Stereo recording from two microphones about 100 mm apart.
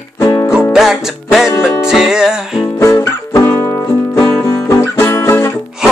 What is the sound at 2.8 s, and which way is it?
Music, 25° left (ahead or behind).